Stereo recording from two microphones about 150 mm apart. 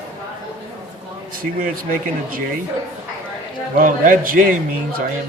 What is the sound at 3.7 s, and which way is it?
Speech, 65° right (ahead or behind).